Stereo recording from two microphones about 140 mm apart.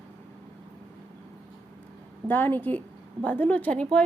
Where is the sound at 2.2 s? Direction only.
15° left (ahead or behind).